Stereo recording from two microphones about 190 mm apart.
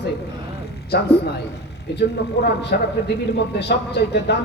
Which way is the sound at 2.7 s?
50° left (ahead or behind).